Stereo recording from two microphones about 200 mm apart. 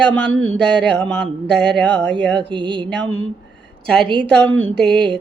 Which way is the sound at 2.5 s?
25° right (ahead or behind).